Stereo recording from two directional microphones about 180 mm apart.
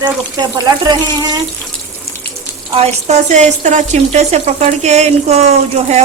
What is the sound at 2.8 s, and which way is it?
Speech, 35° right (ahead or behind).